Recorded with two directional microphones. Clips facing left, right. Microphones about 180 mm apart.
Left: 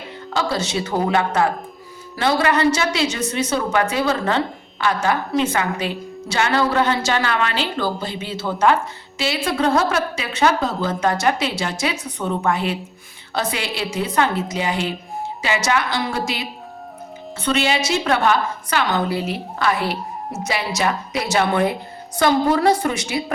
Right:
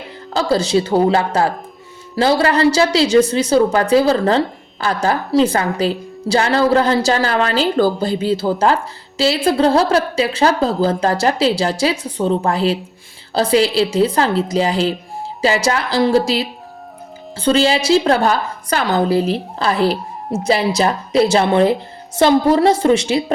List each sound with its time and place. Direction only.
0.3 s a woman's voice: 35° right (ahead or behind)